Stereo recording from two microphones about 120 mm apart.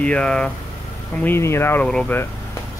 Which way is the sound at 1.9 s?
5° left (ahead or behind).